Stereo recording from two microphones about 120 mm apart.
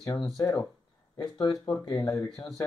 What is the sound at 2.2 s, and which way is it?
Speech, 5° left (ahead or behind).